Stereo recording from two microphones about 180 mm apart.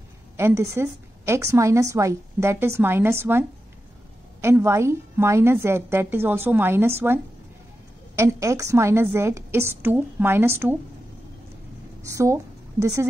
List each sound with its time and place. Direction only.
0.4 s a woman's voice: 15° right (ahead or behind)
8.2 s a woman's voice: 15° right (ahead or behind)
12.1 s a woman's voice: 15° right (ahead or behind)